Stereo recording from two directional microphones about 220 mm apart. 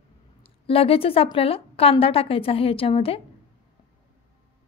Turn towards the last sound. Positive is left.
turn(degrees=25)  # may be behind; listen again after turning